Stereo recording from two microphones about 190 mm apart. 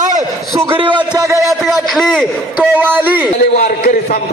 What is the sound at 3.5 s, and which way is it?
Speech, 45° left (ahead or behind).